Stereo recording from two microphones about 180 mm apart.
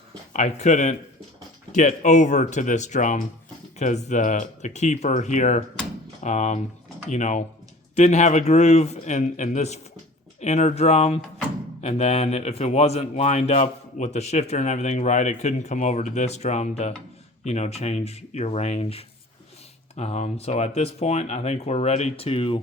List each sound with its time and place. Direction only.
0.3 s a man's voice: 40° left (ahead or behind)